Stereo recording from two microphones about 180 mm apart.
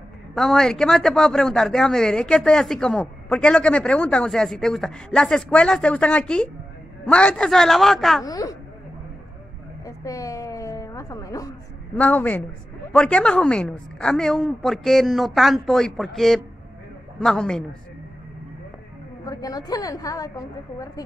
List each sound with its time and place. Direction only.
0.3 s a man's voice: centre (ahead or behind)
8.2 s a woman's voice: 20° left (ahead or behind)
9.8 s a sound: 20° left (ahead or behind)
12.0 s a woman's voice: 10° left (ahead or behind)
19.2 s a woman's voice: 20° left (ahead or behind)